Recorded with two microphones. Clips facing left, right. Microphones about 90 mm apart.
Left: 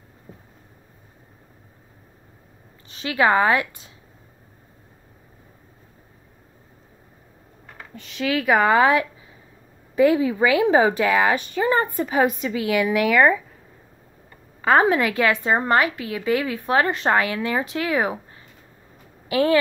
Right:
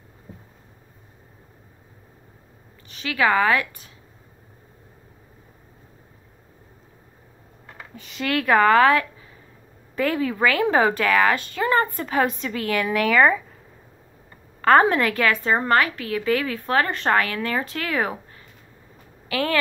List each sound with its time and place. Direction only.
2.9 s speech: 30° left (ahead or behind)
7.9 s a woman's voice: centre (ahead or behind)
14.6 s a woman's voice: 5° left (ahead or behind)
19.2 s speech: 20° left (ahead or behind)